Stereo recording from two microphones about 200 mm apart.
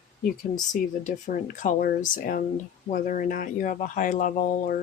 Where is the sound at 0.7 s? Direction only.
40° left (ahead or behind).